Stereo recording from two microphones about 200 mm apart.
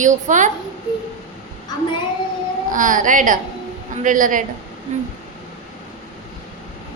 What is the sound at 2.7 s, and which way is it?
A woman's voice, 40° right (ahead or behind).